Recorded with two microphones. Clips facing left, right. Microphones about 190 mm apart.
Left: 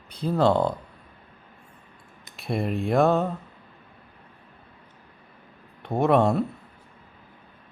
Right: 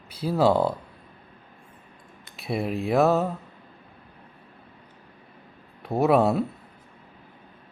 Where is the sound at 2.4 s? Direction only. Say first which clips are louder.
Even; centre (ahead or behind).